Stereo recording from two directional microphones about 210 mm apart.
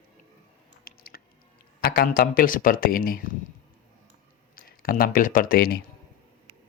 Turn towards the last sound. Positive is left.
turn(degrees=45)  # may be behind; listen again after turning